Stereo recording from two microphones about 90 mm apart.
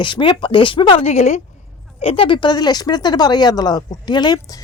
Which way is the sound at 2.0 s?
90° left.